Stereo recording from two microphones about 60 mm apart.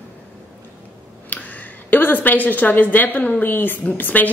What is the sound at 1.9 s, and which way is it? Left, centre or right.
A woman's voice, left.